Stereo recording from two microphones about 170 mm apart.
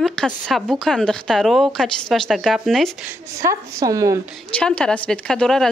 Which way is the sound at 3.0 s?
15° right (ahead or behind).